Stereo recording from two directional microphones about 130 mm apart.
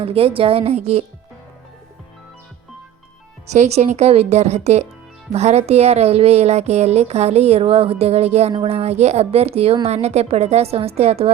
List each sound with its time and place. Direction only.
0.0 s a woman's voice: 45° right (ahead or behind)
3.5 s a woman's voice: 60° right (ahead or behind)